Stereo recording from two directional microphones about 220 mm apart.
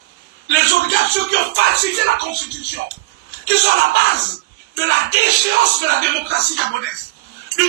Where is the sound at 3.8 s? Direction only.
50° right (ahead or behind).